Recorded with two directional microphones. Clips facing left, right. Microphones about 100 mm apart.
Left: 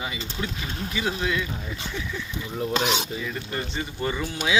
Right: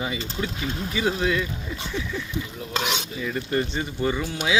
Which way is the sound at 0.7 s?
20° right (ahead or behind).